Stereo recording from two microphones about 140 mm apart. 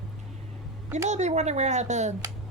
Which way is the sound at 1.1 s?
55° right (ahead or behind).